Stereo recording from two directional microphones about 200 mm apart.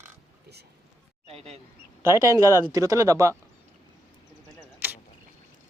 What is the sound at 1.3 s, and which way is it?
Speech, 30° right (ahead or behind).